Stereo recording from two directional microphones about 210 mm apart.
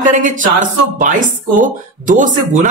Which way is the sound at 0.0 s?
40° right (ahead or behind).